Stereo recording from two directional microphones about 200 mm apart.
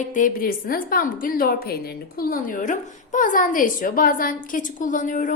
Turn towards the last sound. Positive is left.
turn(degrees=40)  # may be behind; listen again after turning